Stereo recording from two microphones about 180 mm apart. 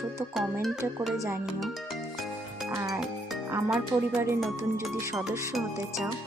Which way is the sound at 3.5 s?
10° right (ahead or behind).